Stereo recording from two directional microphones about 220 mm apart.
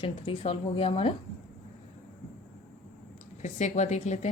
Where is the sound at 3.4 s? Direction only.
30° left (ahead or behind).